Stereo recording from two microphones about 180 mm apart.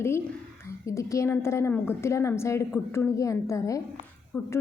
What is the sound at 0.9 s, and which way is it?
A woman's voice, 15° left (ahead or behind).